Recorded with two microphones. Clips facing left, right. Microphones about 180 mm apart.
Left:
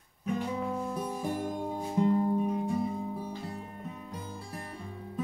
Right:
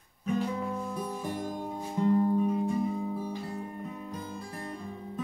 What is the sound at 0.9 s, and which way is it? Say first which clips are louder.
Music: left 1 dB; 10° left (ahead or behind).